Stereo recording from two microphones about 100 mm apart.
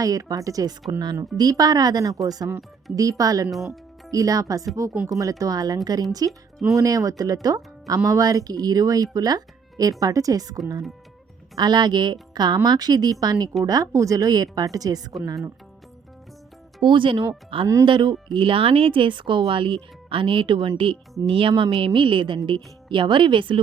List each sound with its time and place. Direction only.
0.0 s a woman's voice: 35° right (ahead or behind)
16.8 s speech: 55° right (ahead or behind)